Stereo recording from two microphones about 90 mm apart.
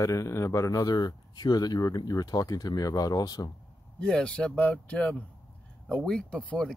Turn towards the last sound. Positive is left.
turn(degrees=5)  # may be behind; listen again after turning